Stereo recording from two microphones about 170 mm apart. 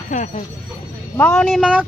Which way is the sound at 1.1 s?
10° left (ahead or behind).